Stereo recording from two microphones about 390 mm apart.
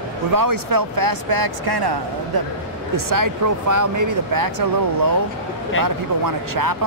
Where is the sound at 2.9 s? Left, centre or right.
Right.